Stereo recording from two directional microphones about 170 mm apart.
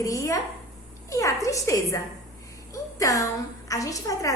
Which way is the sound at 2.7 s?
20° left (ahead or behind).